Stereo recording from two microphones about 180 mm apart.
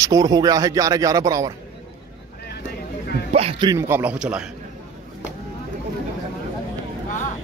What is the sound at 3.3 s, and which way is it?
Speech, 35° right (ahead or behind).